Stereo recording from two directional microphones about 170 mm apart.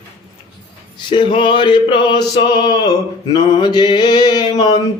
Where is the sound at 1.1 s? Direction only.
30° left (ahead or behind).